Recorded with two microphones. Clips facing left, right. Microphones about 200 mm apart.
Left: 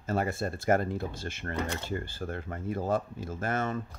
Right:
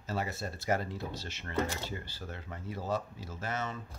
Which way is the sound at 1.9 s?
50° left (ahead or behind).